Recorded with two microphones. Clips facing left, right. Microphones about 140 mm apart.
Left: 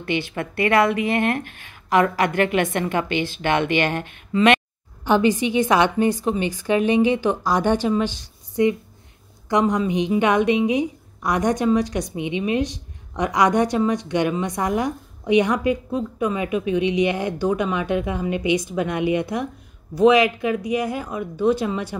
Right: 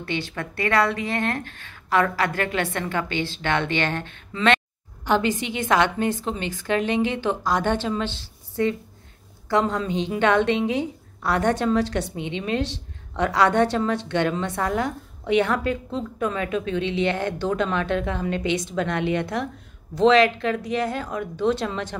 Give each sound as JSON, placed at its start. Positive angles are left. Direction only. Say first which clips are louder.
{"t": 0.0, "sound": "a woman's voice", "louder": "left 4 dB", "side_deg": 15}